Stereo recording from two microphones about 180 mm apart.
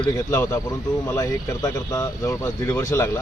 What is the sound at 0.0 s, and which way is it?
Speech, 15° left (ahead or behind).